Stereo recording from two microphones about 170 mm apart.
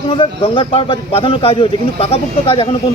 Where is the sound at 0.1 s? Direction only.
30° left (ahead or behind).